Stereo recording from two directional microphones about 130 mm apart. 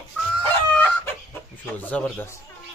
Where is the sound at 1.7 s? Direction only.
15° left (ahead or behind).